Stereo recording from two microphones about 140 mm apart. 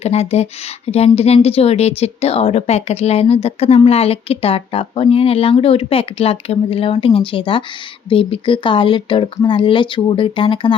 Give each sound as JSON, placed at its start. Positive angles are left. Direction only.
{"t": 0.0, "sound": "a woman's voice", "side_deg": 50}